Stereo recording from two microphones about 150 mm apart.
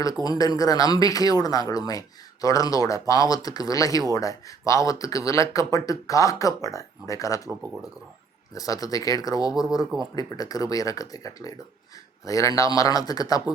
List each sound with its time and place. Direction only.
0.3 s speech: 25° left (ahead or behind)
8.5 s speech: 25° left (ahead or behind)